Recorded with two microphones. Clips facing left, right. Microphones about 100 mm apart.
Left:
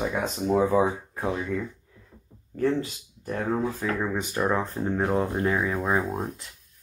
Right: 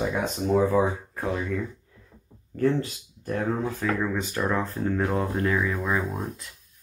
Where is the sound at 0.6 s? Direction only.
20° left (ahead or behind).